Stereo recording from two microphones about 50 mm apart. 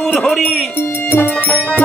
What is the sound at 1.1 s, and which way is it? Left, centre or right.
Music, left.